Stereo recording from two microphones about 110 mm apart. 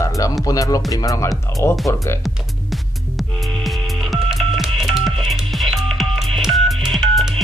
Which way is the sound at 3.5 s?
Centre (ahead or behind).